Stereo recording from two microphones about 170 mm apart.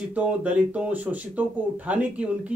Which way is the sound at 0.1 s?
10° right (ahead or behind).